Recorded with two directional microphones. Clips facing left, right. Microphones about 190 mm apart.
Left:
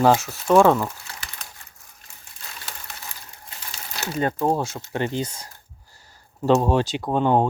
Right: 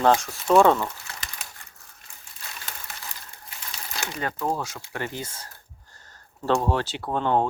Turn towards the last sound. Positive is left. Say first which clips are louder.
# left 4 dB
turn(degrees=15)  # may be behind; listen again after turning